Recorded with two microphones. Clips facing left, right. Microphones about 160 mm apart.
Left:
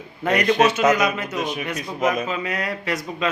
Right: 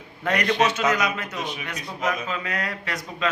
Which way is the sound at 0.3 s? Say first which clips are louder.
Left 4 dB; 5° left (ahead or behind).